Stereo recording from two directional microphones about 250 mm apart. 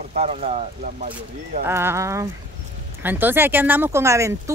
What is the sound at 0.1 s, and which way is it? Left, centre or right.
Speech, right.